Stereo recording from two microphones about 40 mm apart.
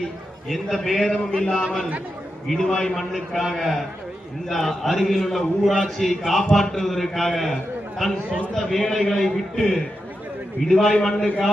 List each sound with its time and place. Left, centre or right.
0.4 s a man's voice: centre
1.0 s a man's voice: centre
2.5 s a man's voice: centre
3.1 s a man's voice: centre